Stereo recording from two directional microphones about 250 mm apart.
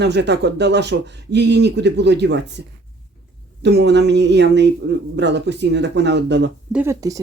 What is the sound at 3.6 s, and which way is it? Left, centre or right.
Speech, right.